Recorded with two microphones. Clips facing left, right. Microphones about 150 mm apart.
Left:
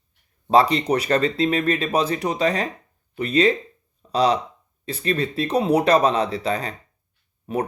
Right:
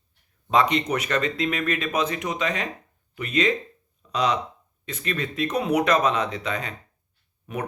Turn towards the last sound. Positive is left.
turn(degrees=30)  # may be behind; listen again after turning